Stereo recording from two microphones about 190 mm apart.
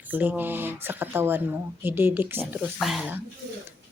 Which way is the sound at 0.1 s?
10° right (ahead or behind).